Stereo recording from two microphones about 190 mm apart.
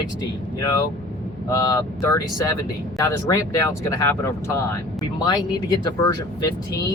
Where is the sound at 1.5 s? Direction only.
15° left (ahead or behind).